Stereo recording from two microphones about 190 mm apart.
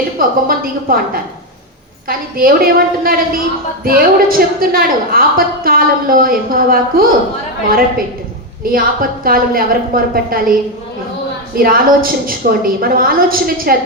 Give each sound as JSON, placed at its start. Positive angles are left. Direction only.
{"t": 0.2, "sound": "a woman's voice", "side_deg": -50}
{"t": 11.5, "sound": "a woman's voice", "side_deg": -50}